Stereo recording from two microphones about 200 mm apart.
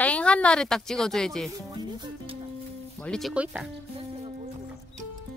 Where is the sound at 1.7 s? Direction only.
20° right (ahead or behind).